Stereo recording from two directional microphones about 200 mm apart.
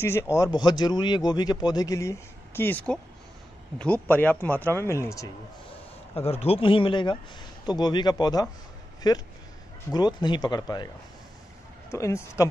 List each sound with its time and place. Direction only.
0.0 s speech: 15° left (ahead or behind)
6.1 s speech: 30° left (ahead or behind)
11.9 s speech: 15° left (ahead or behind)